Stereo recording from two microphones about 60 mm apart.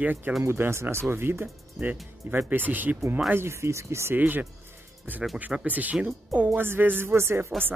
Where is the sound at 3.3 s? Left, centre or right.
Right.